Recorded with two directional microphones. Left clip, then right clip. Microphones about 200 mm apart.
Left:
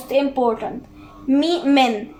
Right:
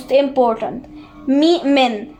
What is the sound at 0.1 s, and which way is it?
A woman's voice, 45° right (ahead or behind).